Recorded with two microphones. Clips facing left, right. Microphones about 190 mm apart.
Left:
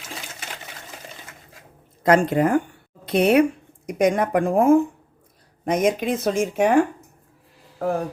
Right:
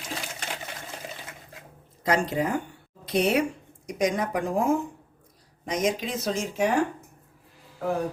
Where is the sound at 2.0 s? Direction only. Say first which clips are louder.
Left 7 dB; 55° left (ahead or behind).